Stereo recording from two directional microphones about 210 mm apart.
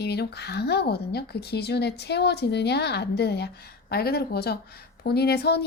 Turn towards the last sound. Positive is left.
turn(degrees=50)  # may be behind; listen again after turning